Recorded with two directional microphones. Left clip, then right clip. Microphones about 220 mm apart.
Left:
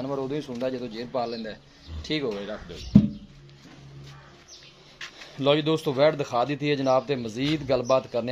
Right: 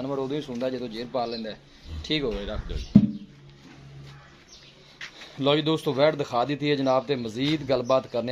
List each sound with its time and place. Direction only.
0.0 s a man's voice: centre (ahead or behind)
2.9 s a sound: 40° left (ahead or behind)
5.2 s speech: centre (ahead or behind)